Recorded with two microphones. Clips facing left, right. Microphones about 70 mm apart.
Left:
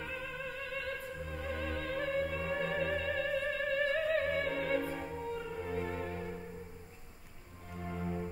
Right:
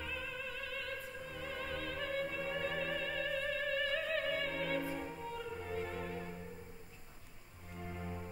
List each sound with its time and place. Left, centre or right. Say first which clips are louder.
0.0 s opera: left 3 dB; left
3.3 s music: left 3 dB; left
7.8 s music: left 6 dB; left